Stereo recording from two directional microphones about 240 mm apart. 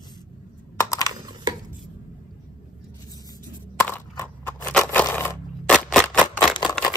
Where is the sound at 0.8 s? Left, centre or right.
Centre.